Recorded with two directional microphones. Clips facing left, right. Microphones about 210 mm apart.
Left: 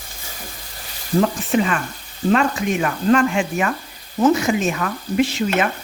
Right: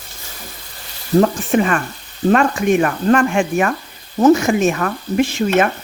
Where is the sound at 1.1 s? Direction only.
50° right (ahead or behind).